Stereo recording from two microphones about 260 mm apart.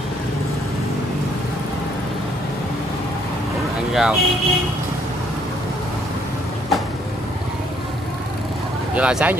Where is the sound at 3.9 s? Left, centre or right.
Centre.